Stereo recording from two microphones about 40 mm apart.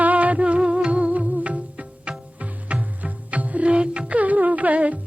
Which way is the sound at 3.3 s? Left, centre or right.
Right.